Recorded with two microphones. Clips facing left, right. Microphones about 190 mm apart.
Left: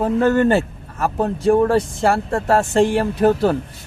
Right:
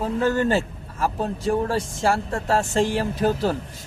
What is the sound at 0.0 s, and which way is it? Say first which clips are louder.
A man's voice: left 6 dB; 60° left (ahead or behind).